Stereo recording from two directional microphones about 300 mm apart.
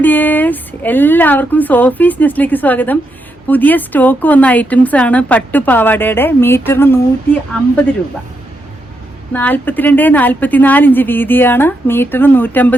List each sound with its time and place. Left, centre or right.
0.0 s a woman's voice: centre
9.3 s a woman's voice: centre